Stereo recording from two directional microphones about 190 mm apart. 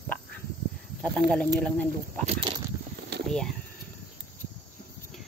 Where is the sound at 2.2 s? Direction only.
30° right (ahead or behind).